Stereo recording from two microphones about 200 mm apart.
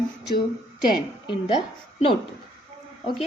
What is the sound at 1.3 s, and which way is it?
Speech, 25° left (ahead or behind).